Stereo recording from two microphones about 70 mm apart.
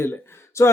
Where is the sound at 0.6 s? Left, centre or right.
Left.